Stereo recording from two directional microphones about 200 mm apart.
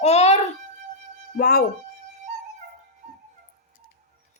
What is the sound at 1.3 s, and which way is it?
Speech, 45° left (ahead or behind).